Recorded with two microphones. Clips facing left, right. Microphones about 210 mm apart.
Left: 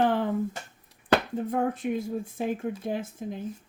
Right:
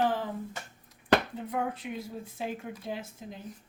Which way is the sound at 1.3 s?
45° left (ahead or behind).